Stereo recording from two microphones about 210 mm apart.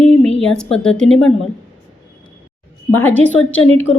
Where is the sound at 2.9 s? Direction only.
10° left (ahead or behind).